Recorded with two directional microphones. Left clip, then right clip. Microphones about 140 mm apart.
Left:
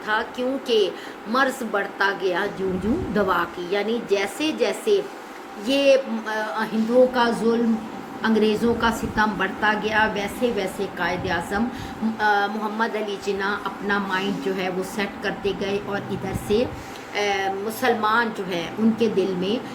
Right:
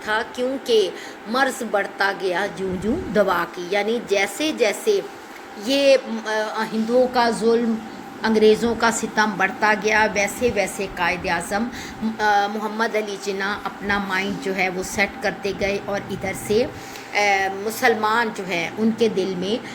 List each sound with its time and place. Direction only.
0.1 s a woman's voice: 35° right (ahead or behind)